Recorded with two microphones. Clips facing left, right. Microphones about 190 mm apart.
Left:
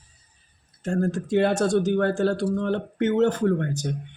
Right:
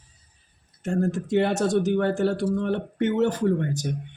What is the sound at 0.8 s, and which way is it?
Speech, 20° right (ahead or behind).